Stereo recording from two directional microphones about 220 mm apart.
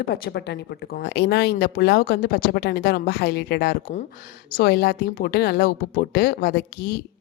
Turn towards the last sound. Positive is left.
turn(degrees=45)  # may be behind; listen again after turning